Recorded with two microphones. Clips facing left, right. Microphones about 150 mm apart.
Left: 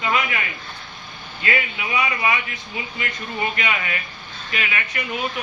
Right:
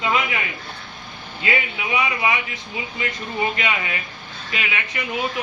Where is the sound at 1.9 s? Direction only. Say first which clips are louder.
Even; 20° right (ahead or behind).